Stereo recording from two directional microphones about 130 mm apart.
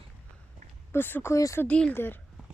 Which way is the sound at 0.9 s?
15° left (ahead or behind).